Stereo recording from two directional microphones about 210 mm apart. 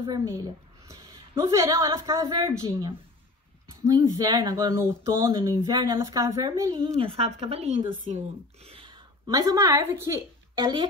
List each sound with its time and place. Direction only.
0.0 s a woman's voice: 15° right (ahead or behind)